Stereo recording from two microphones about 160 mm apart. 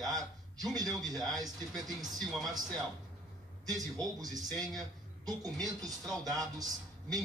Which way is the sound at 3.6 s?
25° right (ahead or behind).